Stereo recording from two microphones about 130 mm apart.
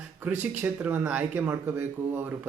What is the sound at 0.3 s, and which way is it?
Speech, 15° right (ahead or behind).